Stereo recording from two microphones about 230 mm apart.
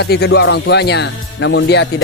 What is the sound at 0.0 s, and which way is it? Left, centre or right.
A man's voice, left.